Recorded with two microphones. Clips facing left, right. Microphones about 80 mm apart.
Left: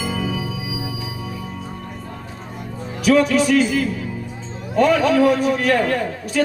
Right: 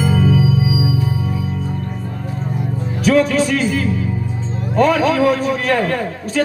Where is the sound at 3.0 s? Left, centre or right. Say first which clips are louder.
Right 1 dB; right.